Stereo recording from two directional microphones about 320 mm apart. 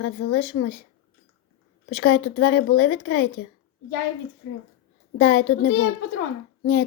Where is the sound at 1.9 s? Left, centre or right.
Left.